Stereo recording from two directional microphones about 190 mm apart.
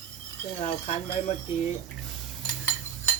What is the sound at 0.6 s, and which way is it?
Speech, 30° left (ahead or behind).